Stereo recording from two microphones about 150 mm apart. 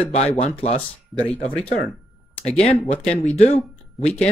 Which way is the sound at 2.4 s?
45° left (ahead or behind).